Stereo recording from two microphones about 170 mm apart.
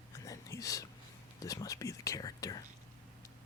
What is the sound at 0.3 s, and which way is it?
Whispering, 20° left (ahead or behind).